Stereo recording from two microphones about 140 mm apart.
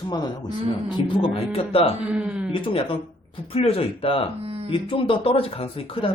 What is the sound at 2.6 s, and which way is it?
Speech, 40° left (ahead or behind).